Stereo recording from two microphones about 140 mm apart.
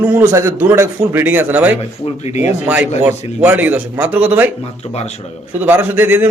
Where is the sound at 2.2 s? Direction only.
50° left (ahead or behind).